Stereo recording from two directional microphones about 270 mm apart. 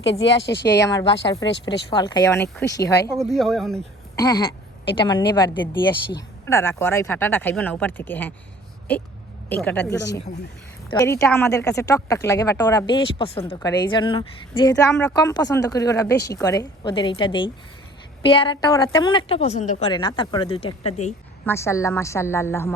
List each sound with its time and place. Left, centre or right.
0.4 s speech: left
0.9 s a woman's voice: centre
3.2 s a woman's voice: centre
4.1 s a woman's voice: centre
9.5 s a woman's voice: centre; by 21.1 s left
21.4 s a woman's voice: centre